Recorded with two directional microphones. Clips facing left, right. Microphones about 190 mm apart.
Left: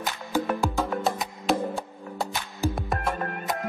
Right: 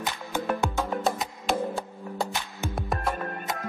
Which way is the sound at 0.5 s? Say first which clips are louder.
Left 1 dB; centre (ahead or behind).